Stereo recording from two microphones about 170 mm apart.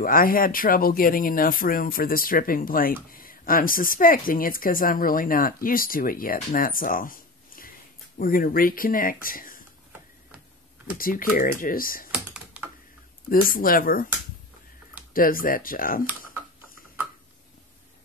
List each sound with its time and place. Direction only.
0.0 s speech: 55° left (ahead or behind)
11.0 s speech: 55° left (ahead or behind)
12.1 s computer keyboard: 10° right (ahead or behind)
13.3 s speech: 55° left (ahead or behind)
15.1 s speech: 55° left (ahead or behind)